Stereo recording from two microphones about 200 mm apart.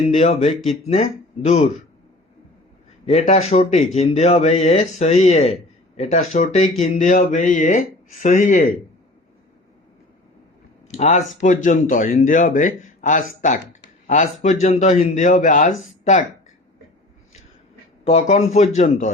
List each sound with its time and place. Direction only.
0.1 s speech: 35° left (ahead or behind)
3.1 s speech: 35° left (ahead or behind)
10.9 s speech: 35° left (ahead or behind)
18.0 s speech: 30° left (ahead or behind)